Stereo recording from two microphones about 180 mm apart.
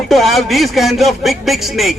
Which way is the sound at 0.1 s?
Centre (ahead or behind).